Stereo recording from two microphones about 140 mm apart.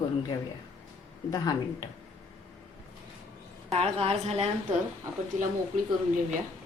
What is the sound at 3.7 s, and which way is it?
Speech, 45° right (ahead or behind).